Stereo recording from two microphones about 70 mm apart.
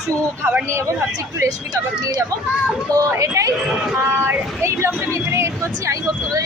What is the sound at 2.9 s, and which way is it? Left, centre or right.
Speech, right.